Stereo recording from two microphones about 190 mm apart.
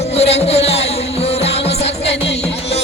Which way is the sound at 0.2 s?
30° left (ahead or behind).